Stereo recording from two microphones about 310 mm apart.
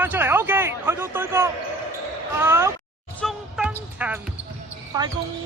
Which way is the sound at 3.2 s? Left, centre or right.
Centre.